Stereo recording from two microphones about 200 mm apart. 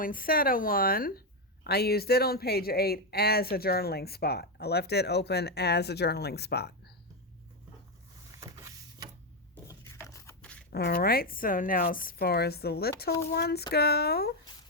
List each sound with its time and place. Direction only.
0.0 s speech: 45° left (ahead or behind)
8.3 s printer: 15° right (ahead or behind)
9.6 s a sound: 15° left (ahead or behind)
10.4 s scissors: 5° left (ahead or behind)
10.7 s speech: 50° left (ahead or behind)